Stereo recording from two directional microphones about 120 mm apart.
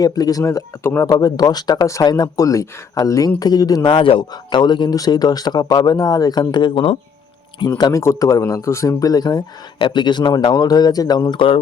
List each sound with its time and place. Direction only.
0.0 s speech: 30° left (ahead or behind)
3.8 s speech: 45° left (ahead or behind)